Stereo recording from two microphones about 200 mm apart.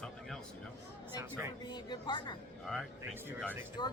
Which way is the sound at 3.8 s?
20° left (ahead or behind).